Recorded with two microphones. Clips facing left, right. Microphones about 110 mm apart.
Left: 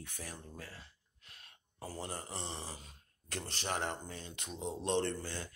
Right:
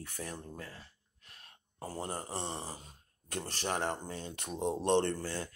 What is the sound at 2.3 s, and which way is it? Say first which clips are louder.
Speech: right 4 dB; 55° right (ahead or behind).